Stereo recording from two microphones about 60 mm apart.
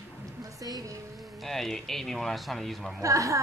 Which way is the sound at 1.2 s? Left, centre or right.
Centre.